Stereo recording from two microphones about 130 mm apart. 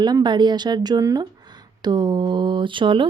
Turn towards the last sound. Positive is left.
turn(degrees=-40)  # may be behind; listen again after turning